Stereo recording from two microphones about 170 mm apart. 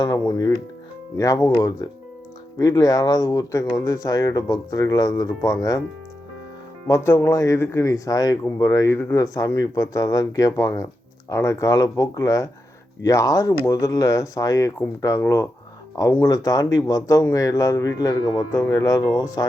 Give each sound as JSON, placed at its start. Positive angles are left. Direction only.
{"t": 0.0, "sound": "speech", "side_deg": 20}
{"t": 6.8, "sound": "speech", "side_deg": 15}